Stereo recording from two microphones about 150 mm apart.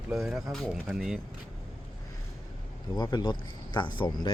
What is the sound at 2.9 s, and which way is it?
Speech, 30° left (ahead or behind).